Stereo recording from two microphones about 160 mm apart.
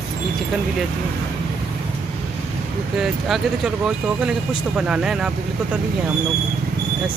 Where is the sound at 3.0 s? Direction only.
Centre (ahead or behind).